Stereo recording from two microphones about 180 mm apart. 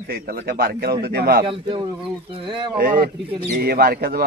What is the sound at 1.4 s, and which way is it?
Speech, 30° right (ahead or behind).